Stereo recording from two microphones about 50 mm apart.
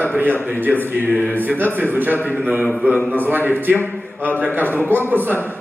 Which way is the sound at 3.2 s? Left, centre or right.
Right.